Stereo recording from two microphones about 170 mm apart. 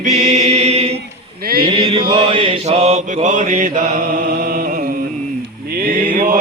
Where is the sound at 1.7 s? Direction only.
25° right (ahead or behind); by 3.8 s 50° right (ahead or behind).